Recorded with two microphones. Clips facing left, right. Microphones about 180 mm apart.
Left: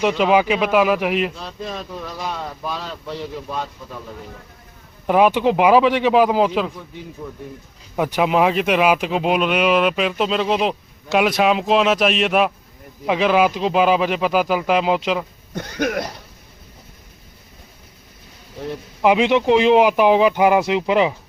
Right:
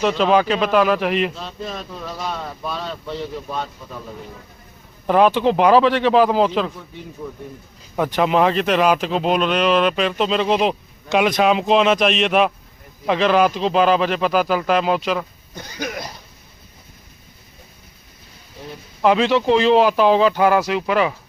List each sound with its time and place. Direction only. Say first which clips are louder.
0.0 s speech: even; 10° left (ahead or behind)
5.0 s speech: even; 10° left (ahead or behind)
7.9 s speech: even; 10° left (ahead or behind)
15.5 s cough: left 7 dB; 60° left (ahead or behind)
19.0 s speech: left 1 dB; 15° left (ahead or behind)